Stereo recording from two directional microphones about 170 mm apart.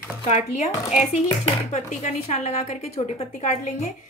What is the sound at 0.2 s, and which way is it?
A woman's voice, 40° left (ahead or behind).